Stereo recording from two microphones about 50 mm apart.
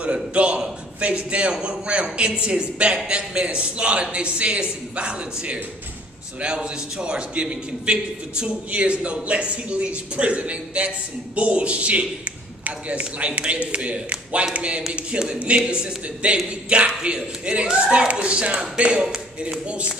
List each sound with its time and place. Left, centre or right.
0.0 s a man's voice: right